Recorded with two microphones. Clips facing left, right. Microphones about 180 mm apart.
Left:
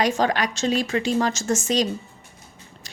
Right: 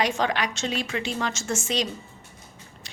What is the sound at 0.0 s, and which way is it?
A woman's voice, 40° left (ahead or behind).